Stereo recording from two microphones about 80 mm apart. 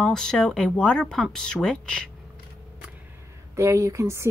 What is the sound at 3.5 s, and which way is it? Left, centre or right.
Speech, right.